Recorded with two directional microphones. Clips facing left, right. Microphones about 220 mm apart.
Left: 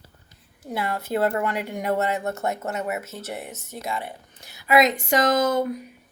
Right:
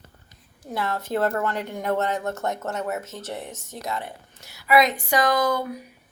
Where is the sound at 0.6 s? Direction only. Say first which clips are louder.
Even; 10° left (ahead or behind).